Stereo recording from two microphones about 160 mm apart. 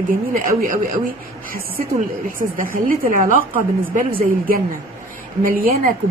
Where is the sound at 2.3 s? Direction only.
60° right (ahead or behind).